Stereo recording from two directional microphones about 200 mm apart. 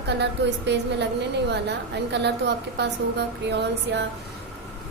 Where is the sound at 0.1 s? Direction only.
60° right (ahead or behind).